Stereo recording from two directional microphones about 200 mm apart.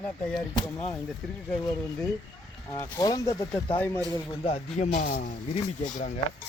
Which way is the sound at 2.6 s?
15° left (ahead or behind).